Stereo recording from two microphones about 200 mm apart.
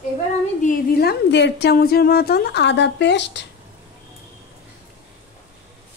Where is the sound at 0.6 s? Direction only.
45° left (ahead or behind).